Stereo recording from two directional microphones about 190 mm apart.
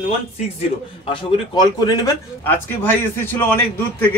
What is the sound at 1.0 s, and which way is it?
A man's voice, 25° left (ahead or behind).